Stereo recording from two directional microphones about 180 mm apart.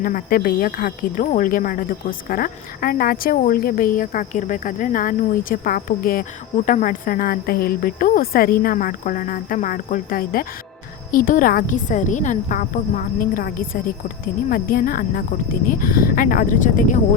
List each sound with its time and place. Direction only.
0.0 s speech: 50° left (ahead or behind)